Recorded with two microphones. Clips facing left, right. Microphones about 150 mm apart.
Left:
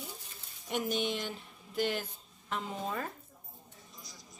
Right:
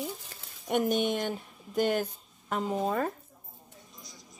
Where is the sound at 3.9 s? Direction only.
Centre (ahead or behind).